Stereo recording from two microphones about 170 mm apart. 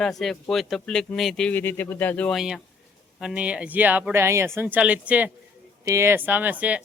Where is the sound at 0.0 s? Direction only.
Centre (ahead or behind).